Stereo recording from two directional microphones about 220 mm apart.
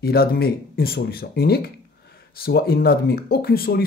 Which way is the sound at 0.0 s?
45° left (ahead or behind).